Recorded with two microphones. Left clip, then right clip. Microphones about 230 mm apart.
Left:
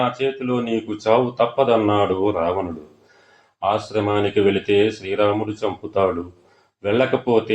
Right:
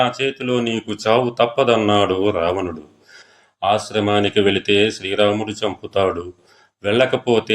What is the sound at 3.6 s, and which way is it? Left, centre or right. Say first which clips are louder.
Speech: right 2 dB; right.